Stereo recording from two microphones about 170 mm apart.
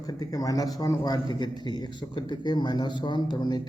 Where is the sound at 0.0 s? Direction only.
20° left (ahead or behind).